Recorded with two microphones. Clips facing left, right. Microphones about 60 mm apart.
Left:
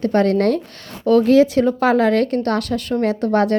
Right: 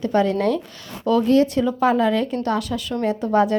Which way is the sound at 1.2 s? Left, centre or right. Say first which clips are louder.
Left 3 dB; left.